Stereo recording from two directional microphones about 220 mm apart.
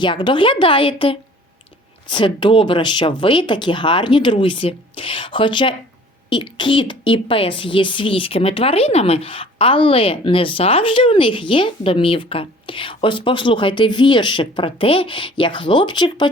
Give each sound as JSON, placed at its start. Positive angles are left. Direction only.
{"t": 0.0, "sound": "a woman's voice", "side_deg": 20}